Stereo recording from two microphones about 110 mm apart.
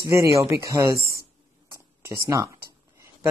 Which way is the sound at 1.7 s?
30° right (ahead or behind).